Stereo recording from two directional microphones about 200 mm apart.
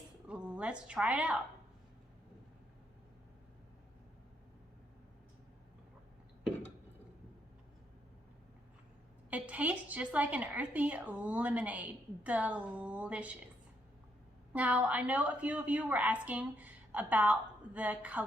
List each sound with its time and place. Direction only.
0.3 s a woman's voice: 5° right (ahead or behind)
9.3 s a woman's voice: 5° right (ahead or behind)
14.5 s a woman's voice: 5° right (ahead or behind)